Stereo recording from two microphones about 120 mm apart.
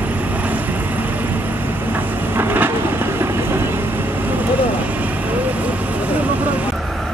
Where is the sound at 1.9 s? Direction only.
15° right (ahead or behind).